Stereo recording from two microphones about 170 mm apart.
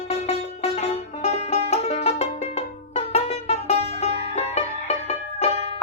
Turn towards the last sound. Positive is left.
turn(degrees=40)  # may be behind; listen again after turning